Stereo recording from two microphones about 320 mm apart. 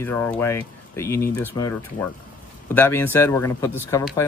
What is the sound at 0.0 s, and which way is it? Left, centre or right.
Speech, centre.